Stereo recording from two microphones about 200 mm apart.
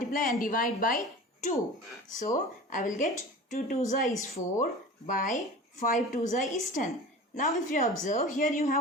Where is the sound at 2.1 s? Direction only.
40° left (ahead or behind).